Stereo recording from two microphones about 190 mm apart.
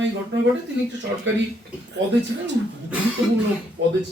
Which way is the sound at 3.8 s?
65° right (ahead or behind).